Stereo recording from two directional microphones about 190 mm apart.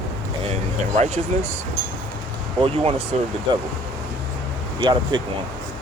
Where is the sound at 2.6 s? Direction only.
30° right (ahead or behind).